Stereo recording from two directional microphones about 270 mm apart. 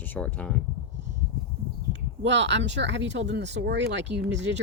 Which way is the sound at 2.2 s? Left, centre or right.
Right.